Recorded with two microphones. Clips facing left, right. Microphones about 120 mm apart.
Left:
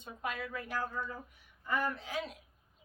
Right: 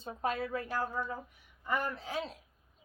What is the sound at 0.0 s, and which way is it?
A woman's voice, 35° right (ahead or behind).